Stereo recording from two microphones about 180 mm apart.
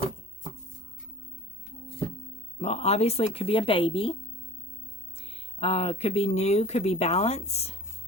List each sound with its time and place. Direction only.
2.6 s speech: 35° left (ahead or behind)
5.3 s speech: 35° left (ahead or behind)